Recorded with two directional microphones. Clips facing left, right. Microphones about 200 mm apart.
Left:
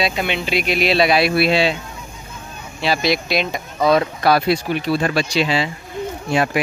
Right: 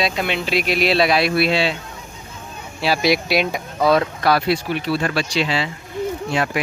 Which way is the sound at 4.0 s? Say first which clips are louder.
Left 2 dB; 15° left (ahead or behind).